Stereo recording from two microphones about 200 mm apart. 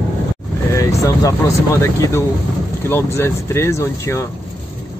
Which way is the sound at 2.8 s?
10° left (ahead or behind).